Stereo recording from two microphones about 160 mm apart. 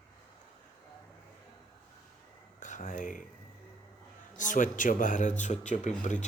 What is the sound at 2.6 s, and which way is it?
Speech, 50° left (ahead or behind).